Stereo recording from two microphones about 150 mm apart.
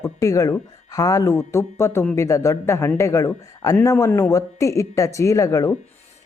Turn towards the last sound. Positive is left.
turn(degrees=20)  # may be behind; listen again after turning